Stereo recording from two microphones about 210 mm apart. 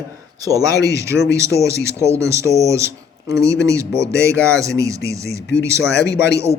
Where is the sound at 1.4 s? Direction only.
15° right (ahead or behind).